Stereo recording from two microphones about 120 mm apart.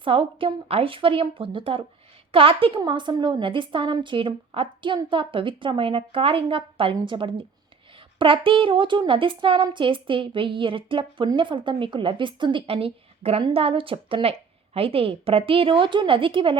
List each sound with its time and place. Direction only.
0.0 s a woman's voice: 50° right (ahead or behind)